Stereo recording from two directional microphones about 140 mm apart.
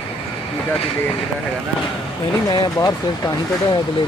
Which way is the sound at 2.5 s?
30° left (ahead or behind).